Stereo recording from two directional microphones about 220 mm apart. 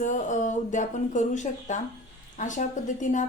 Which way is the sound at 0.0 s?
35° left (ahead or behind).